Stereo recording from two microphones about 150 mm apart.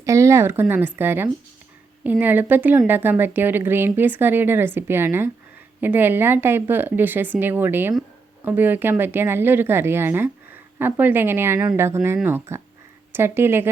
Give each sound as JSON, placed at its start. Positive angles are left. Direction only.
{"t": 0.0, "sound": "a woman's voice", "side_deg": -20}